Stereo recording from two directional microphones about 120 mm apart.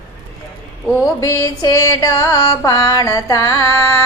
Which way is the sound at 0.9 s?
Centre (ahead or behind).